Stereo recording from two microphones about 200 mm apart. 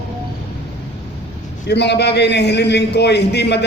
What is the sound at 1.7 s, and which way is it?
A man's voice, 60° left (ahead or behind).